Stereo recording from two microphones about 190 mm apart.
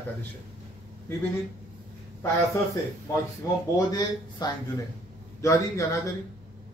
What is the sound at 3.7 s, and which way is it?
A man's voice, 20° left (ahead or behind).